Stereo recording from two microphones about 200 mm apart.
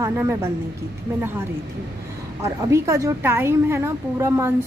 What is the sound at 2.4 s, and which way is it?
A woman's voice, 15° right (ahead or behind).